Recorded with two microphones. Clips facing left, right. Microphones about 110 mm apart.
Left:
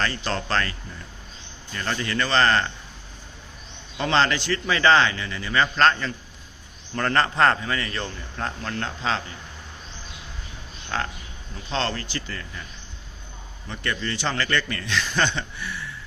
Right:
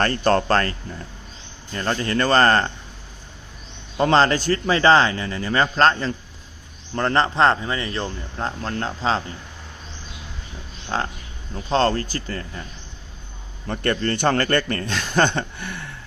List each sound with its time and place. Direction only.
0.0 s a man's voice: 50° right (ahead or behind)
3.9 s speech: 40° right (ahead or behind)
10.8 s speech: 30° right (ahead or behind)
13.7 s a man's voice: 50° right (ahead or behind)